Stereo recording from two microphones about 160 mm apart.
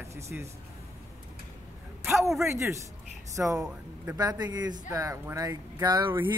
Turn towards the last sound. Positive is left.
turn(degrees=-20)  # may be behind; listen again after turning